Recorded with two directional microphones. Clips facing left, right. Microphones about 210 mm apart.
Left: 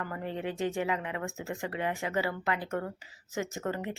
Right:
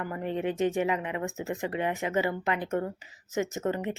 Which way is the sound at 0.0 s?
20° right (ahead or behind).